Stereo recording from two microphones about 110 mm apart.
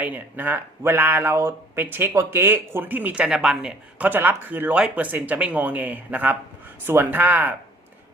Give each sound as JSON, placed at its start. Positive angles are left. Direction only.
{"t": 0.0, "sound": "speech", "side_deg": -15}